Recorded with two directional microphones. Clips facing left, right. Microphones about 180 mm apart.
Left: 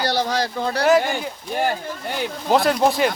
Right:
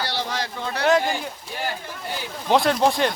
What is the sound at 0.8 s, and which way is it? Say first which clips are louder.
Speech: left 2 dB; centre (ahead or behind).